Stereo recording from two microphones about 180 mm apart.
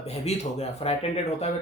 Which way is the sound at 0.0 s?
35° left (ahead or behind).